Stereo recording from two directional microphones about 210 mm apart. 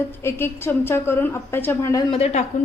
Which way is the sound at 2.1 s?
30° left (ahead or behind).